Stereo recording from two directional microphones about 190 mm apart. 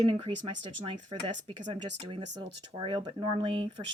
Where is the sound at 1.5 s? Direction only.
30° right (ahead or behind).